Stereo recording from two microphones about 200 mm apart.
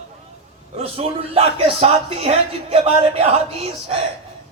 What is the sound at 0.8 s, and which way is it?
Speech, 30° right (ahead or behind).